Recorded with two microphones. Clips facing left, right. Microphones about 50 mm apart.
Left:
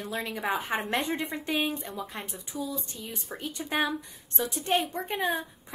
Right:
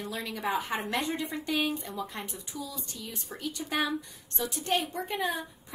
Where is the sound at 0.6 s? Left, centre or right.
Left.